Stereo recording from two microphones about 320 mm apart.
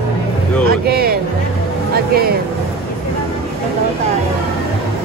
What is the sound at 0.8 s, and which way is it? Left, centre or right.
Speech, right.